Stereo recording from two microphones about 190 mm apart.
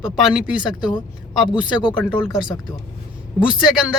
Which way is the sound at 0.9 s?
25° left (ahead or behind).